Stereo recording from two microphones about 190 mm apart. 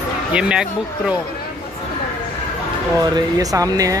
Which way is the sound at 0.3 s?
5° right (ahead or behind).